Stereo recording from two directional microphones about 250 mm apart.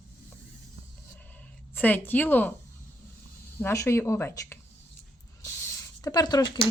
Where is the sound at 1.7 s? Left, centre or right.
Centre.